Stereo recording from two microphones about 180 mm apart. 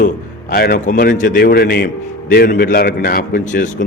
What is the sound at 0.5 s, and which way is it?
A man's voice, 55° left (ahead or behind).